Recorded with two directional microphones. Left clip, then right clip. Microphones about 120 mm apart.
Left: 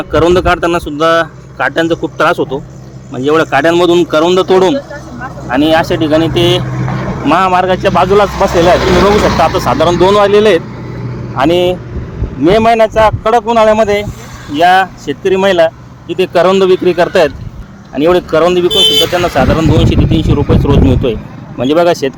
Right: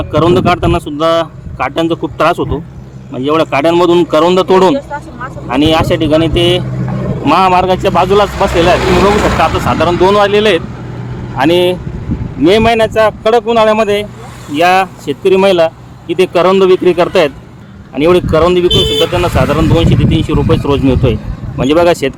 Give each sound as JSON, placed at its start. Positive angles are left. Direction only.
{"t": 0.0, "sound": "speech", "side_deg": -10}
{"t": 5.5, "sound": "speech", "side_deg": -20}
{"t": 7.3, "sound": "speech", "side_deg": -25}
{"t": 7.6, "sound": "speech", "side_deg": -35}
{"t": 7.9, "sound": "speech", "side_deg": -20}
{"t": 8.4, "sound": "speech", "side_deg": 0}
{"t": 11.3, "sound": "speech", "side_deg": -25}